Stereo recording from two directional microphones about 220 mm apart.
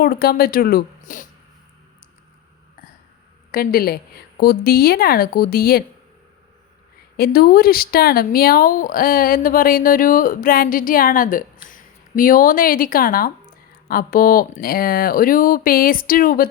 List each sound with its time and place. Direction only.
0.0 s a woman's voice: 45° left (ahead or behind)
3.5 s a woman's voice: 40° left (ahead or behind)
7.2 s speech: 45° left (ahead or behind)